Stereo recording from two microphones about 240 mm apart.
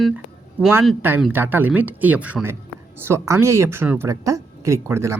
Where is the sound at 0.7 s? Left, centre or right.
Centre.